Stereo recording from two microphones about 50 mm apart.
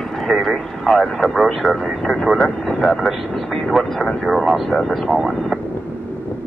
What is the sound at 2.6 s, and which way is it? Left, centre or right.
Vehicle, centre.